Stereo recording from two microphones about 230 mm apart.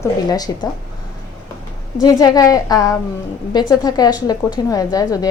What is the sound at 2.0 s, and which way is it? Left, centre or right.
A woman's voice, centre.